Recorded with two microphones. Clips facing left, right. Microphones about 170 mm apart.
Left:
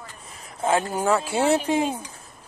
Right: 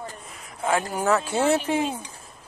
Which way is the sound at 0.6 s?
25° left (ahead or behind).